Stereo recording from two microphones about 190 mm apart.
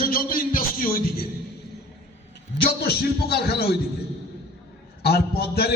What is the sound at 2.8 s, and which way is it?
Speech, 60° left (ahead or behind).